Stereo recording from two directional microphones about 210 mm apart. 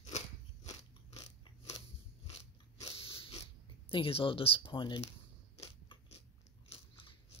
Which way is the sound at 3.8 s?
25° left (ahead or behind).